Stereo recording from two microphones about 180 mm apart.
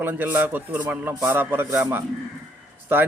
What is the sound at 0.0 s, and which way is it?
Speech, 10° right (ahead or behind).